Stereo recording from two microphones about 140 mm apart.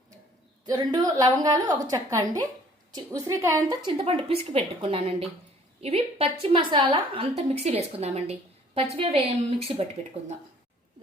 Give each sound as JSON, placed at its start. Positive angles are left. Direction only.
{"t": 0.6, "sound": "a woman's voice", "side_deg": -30}
{"t": 3.8, "sound": "a woman's voice", "side_deg": -40}